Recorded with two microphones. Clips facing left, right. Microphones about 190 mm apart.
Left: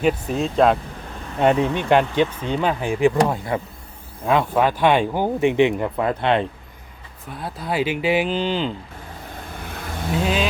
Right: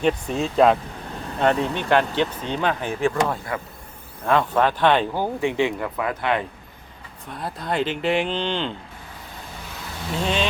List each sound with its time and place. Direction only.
0.0 s speech: 5° left (ahead or behind)
1.4 s speech: 15° left (ahead or behind)
7.3 s speech: centre (ahead or behind)
9.6 s vehicle: 55° left (ahead or behind)
10.2 s vehicle: 5° left (ahead or behind)